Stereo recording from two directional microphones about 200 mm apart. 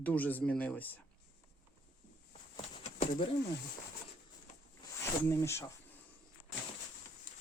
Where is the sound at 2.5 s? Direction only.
35° left (ahead or behind).